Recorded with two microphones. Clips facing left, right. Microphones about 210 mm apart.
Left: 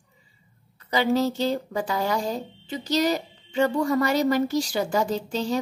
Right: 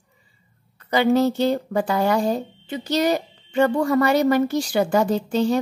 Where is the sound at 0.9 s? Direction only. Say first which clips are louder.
Right 4 dB; 55° right (ahead or behind).